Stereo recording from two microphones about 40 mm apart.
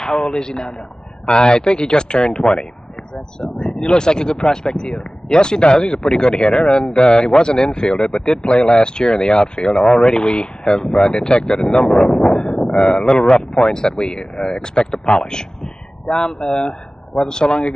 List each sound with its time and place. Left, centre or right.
0.0 s a man's voice: centre
11.6 s speech: centre